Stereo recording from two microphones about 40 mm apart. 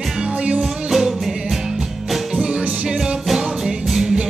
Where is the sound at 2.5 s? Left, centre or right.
Right.